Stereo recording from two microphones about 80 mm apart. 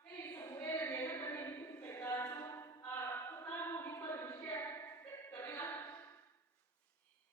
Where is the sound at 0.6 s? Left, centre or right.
Left.